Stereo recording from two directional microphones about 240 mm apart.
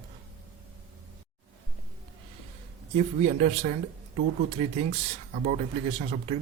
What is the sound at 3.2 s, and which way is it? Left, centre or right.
A man's voice, right.